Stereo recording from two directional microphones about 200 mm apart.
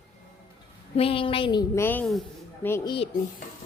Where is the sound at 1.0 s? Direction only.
30° left (ahead or behind); by 2.9 s 10° left (ahead or behind).